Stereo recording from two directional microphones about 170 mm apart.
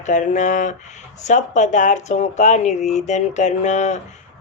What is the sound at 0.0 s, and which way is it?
Speech, 45° left (ahead or behind).